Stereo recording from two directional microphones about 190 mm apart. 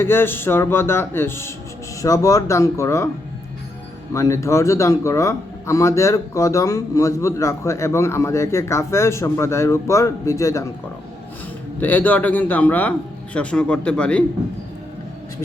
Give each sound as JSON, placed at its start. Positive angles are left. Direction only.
{"t": 0.0, "sound": "speech", "side_deg": 10}
{"t": 4.1, "sound": "speech", "side_deg": 15}
{"t": 11.8, "sound": "speech", "side_deg": 10}